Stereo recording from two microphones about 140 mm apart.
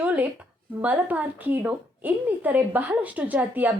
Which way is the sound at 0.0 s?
10° right (ahead or behind).